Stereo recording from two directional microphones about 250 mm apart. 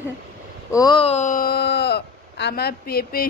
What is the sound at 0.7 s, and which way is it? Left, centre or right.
Speech, centre.